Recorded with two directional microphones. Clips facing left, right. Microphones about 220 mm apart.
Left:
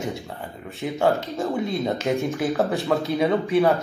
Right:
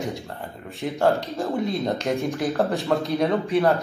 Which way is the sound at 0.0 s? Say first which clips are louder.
Even; centre (ahead or behind).